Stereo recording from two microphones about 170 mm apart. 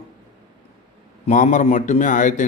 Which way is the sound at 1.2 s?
45° left (ahead or behind).